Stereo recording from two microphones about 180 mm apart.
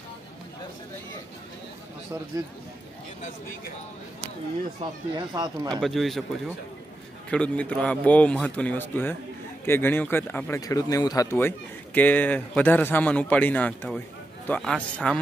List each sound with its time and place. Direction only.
2.3 s speech: 20° right (ahead or behind)
5.1 s speech: 20° right (ahead or behind)
5.8 s a man's voice: centre (ahead or behind)
7.2 s a man's voice: 5° left (ahead or behind)